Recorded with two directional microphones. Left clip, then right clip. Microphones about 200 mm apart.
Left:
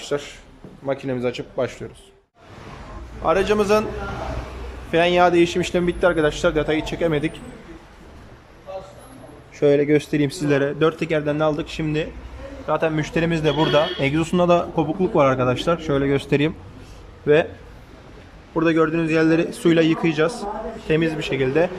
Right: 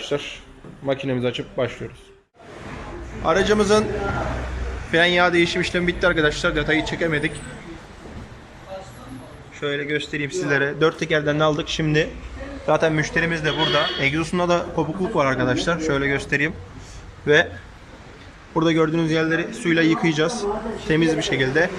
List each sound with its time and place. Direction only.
0.0 s a man's voice: 5° left (ahead or behind)
3.2 s speech: 5° left (ahead or behind)
4.9 s speech: 10° left (ahead or behind)
9.6 s speech: 25° left (ahead or behind)
10.5 s speech: 5° left (ahead or behind)
18.5 s speech: centre (ahead or behind)
19.3 s speech: 15° left (ahead or behind)